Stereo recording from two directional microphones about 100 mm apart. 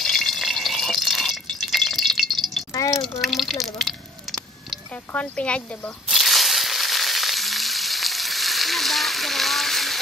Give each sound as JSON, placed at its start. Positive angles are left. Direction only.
{"t": 0.0, "sound": "drip", "side_deg": 5}
{"t": 2.7, "sound": "drip", "side_deg": 35}
{"t": 3.0, "sound": "speech", "side_deg": 0}
{"t": 5.1, "sound": "speech", "side_deg": 15}
{"t": 6.0, "sound": "frying", "side_deg": 0}